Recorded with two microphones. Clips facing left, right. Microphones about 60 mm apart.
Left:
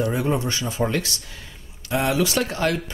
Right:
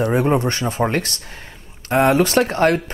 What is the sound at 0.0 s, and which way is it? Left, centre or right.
Speech, right.